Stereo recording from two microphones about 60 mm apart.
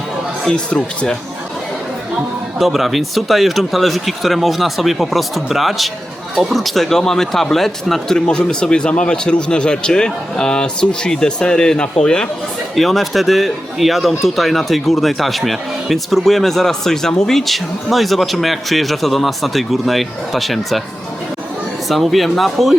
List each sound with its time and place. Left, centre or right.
0.5 s speech: centre
2.6 s speech: centre
12.7 s speech: centre
21.8 s speech: centre